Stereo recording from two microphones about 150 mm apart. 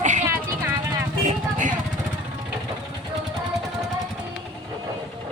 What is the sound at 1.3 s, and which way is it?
Vehicle, 60° right (ahead or behind).